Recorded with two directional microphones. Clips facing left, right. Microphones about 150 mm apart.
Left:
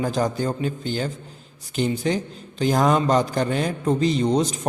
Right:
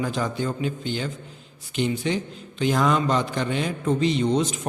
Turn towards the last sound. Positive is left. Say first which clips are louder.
# left 2 dB
turn(degrees=35)  # may be behind; listen again after turning